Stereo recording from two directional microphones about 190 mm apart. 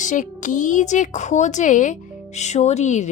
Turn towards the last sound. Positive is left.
turn(degrees=40)  # may be behind; listen again after turning